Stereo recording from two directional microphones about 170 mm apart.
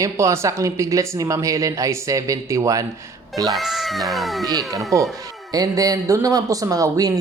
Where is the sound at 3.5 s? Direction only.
Centre (ahead or behind).